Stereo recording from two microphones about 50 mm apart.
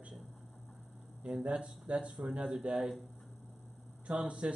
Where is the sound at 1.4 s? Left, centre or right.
Right.